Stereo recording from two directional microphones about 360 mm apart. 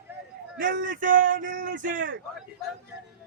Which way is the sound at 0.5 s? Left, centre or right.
Right.